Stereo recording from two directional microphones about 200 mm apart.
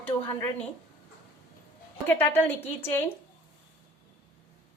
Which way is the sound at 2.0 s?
10° left (ahead or behind).